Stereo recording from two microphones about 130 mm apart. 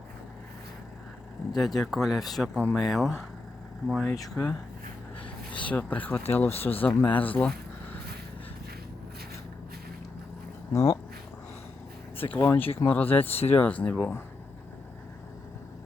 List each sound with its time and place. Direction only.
1.5 s speech: centre (ahead or behind)
5.5 s speech: 10° left (ahead or behind)
10.7 s speech: 25° left (ahead or behind)
12.3 s speech: 15° left (ahead or behind)